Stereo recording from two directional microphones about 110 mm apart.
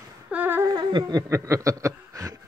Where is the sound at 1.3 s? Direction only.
30° right (ahead or behind).